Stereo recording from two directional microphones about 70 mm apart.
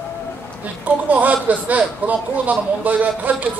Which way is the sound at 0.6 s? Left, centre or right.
Right.